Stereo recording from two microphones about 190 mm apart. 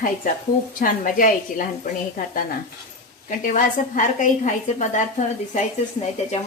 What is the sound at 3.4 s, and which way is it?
A woman's voice, 45° left (ahead or behind).